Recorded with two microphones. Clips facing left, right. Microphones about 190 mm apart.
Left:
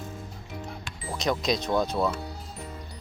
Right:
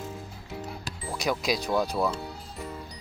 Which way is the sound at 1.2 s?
5° right (ahead or behind).